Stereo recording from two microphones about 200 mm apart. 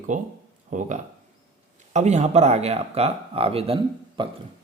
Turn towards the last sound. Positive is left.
turn(degrees=-25)  # may be behind; listen again after turning